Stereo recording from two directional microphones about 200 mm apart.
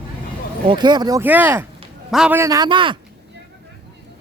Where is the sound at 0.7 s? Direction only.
20° right (ahead or behind).